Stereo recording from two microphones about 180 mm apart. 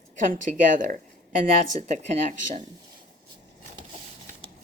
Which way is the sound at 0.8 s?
50° right (ahead or behind).